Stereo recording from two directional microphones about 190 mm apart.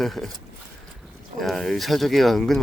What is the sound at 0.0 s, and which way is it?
Speech, 5° left (ahead or behind).